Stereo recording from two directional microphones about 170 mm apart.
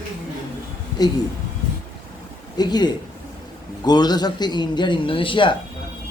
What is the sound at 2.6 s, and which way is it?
A man's voice, 25° left (ahead or behind).